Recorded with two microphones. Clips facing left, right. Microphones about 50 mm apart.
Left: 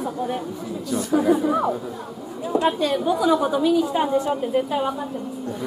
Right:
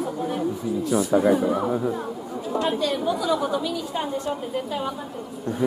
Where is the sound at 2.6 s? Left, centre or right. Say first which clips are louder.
Left 3 dB; centre.